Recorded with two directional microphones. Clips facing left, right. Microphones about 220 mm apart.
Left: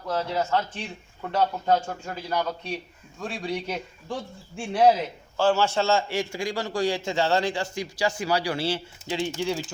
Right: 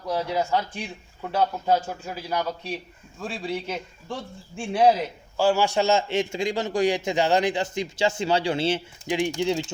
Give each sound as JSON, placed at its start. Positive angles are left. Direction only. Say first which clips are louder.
{"t": 0.1, "sound": "a man's voice", "louder": "right 1 dB", "side_deg": -15}
{"t": 5.4, "sound": "a man's voice", "louder": "right 1 dB", "side_deg": -10}